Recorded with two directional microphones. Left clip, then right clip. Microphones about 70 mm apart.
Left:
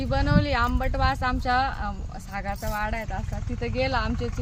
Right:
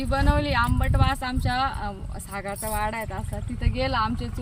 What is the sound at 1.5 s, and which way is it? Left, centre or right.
Speech, left.